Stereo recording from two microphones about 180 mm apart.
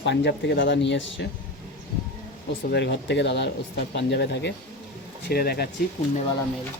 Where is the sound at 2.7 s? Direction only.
70° left (ahead or behind).